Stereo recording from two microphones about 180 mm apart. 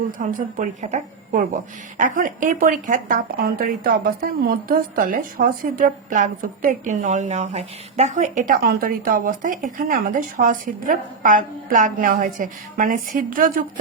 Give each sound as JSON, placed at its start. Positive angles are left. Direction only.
{"t": 0.2, "sound": "a woman's voice", "side_deg": -50}